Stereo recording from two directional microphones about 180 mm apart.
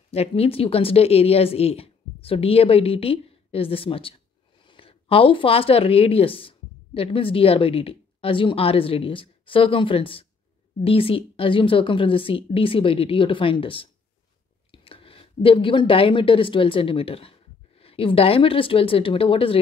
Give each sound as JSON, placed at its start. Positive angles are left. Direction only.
{"t": 0.1, "sound": "a woman's voice", "side_deg": 35}